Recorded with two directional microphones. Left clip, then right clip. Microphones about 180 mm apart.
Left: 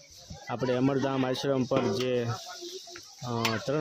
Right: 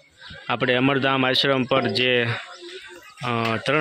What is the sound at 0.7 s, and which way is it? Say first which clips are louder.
Speech: right 7 dB; centre (ahead or behind).